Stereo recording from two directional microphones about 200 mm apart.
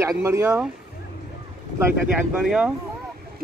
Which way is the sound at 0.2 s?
15° right (ahead or behind).